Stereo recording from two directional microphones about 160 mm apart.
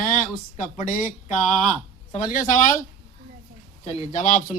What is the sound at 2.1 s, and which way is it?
Speech, 55° left (ahead or behind).